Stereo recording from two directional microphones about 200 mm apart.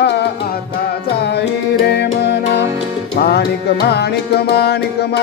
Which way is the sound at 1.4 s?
55° left (ahead or behind).